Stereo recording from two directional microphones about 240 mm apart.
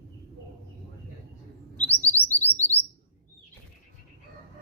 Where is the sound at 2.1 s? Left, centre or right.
Centre.